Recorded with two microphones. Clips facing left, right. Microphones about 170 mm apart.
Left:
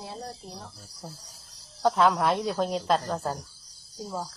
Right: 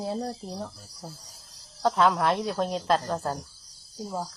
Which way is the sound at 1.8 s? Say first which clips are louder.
Even; centre (ahead or behind).